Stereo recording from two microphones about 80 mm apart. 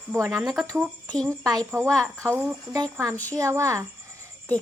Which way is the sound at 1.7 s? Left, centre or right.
Right.